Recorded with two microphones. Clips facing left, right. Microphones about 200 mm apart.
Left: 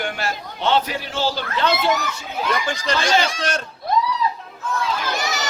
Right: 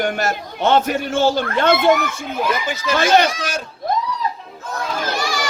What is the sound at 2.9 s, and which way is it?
Speech, 55° right (ahead or behind).